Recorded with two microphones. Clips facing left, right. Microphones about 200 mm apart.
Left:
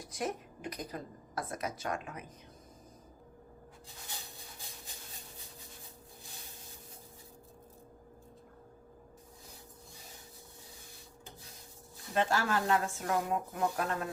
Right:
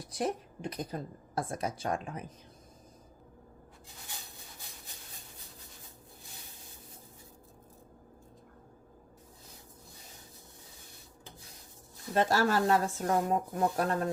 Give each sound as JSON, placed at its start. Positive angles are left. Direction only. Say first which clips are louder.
{"t": 0.1, "sound": "a woman's voice", "louder": "right 4 dB", "side_deg": -30}
{"t": 12.1, "sound": "a woman's voice", "louder": "right 4 dB", "side_deg": -40}